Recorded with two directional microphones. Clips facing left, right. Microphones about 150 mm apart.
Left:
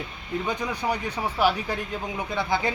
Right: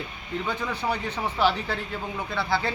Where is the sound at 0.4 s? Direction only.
15° left (ahead or behind).